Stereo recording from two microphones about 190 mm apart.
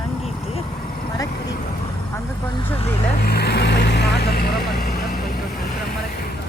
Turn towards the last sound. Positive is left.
turn(degrees=55)  # may be behind; listen again after turning